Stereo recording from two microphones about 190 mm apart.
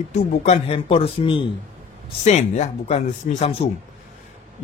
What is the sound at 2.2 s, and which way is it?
Speech, 35° left (ahead or behind).